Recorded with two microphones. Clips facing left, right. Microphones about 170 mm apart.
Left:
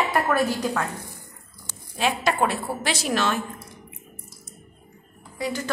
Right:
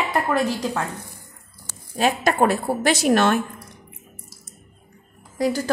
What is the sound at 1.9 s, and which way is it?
A woman's voice, 45° right (ahead or behind).